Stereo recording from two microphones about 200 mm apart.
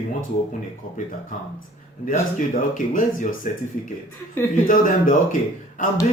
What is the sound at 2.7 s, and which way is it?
Speech, 40° left (ahead or behind).